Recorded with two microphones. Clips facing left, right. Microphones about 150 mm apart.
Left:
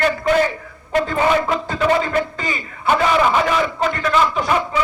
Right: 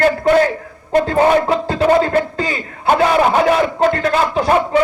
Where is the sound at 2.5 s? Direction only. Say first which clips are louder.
Right 2 dB; 45° right (ahead or behind).